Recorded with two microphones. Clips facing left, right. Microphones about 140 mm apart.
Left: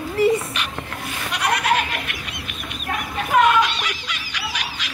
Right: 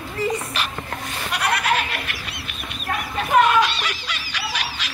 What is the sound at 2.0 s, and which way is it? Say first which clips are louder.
Fowl: left 1 dB; 35° right (ahead or behind).